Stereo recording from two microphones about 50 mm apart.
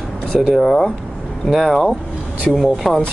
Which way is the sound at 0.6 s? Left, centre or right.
Centre.